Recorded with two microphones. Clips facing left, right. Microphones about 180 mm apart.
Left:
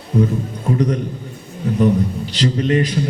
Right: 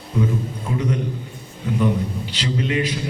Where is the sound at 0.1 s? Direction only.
40° left (ahead or behind).